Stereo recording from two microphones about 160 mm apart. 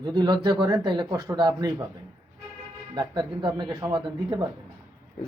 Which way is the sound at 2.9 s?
25° right (ahead or behind).